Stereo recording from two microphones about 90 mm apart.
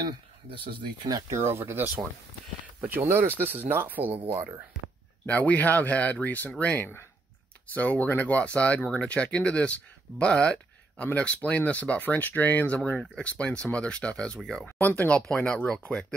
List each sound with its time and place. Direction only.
0.0 s speech: 65° right (ahead or behind)
1.0 s speech: 45° right (ahead or behind)
1.4 s speech: 25° right (ahead or behind)
5.2 s speech: 15° left (ahead or behind)
14.8 s speech: 15° left (ahead or behind)